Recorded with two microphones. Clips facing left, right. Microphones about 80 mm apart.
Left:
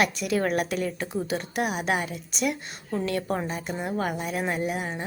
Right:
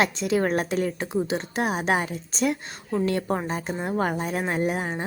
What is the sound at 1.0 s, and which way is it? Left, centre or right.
A woman's voice, right.